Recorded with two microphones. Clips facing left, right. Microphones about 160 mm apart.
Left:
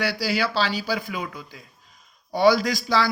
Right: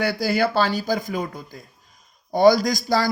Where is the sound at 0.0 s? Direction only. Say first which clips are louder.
Right 4 dB; 50° right (ahead or behind).